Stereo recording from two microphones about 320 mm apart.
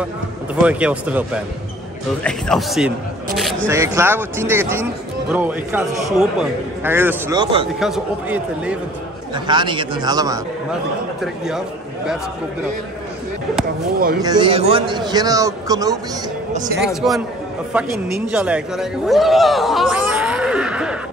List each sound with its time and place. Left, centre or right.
0.6 s a man's voice: centre
9.3 s a man's voice: centre
14.2 s a man's voice: centre
16.8 s a man's voice: centre